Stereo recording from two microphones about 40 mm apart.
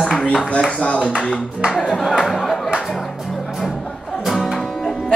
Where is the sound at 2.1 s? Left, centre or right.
Centre.